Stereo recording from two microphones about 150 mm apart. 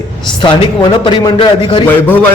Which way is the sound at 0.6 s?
30° left (ahead or behind).